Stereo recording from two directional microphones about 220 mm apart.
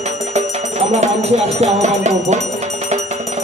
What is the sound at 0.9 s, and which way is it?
Speech, 30° right (ahead or behind).